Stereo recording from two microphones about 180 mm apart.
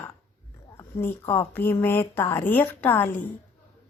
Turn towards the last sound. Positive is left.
turn(degrees=10)  # may be behind; listen again after turning